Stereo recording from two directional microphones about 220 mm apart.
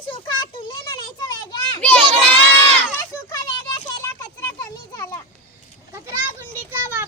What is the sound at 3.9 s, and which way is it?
Children playing, 15° left (ahead or behind).